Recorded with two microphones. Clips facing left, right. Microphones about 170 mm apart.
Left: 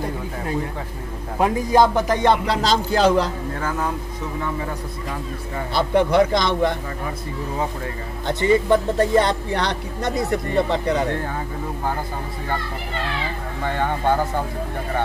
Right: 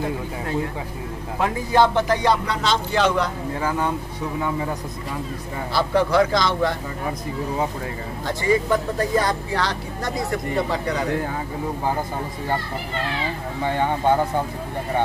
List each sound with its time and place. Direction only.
1.4 s speech: 15° left (ahead or behind); by 3.3 s 35° left (ahead or behind)
5.8 s speech: 20° left (ahead or behind)
8.3 s speech: 25° left (ahead or behind)
13.7 s speech: 15° right (ahead or behind)